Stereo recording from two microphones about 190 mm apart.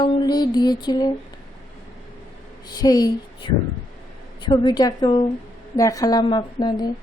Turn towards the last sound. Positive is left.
turn(degrees=20)  # may be behind; listen again after turning